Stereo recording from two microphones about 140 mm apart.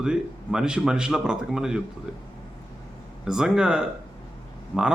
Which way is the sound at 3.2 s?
5° right (ahead or behind).